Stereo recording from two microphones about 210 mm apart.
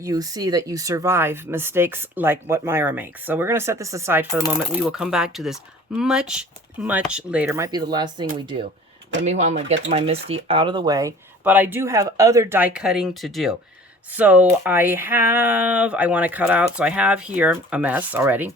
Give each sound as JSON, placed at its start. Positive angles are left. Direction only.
{"t": 0.0, "sound": "speech", "side_deg": -15}
{"t": 9.2, "sound": "speech", "side_deg": -35}